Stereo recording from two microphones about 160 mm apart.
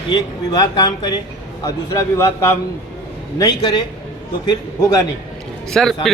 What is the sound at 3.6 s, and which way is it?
A man's voice, 30° left (ahead or behind).